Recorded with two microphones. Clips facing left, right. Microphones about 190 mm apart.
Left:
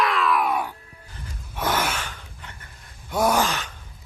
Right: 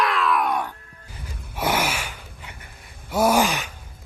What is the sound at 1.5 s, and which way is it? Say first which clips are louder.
Gasp: right 1 dB; 10° right (ahead or behind).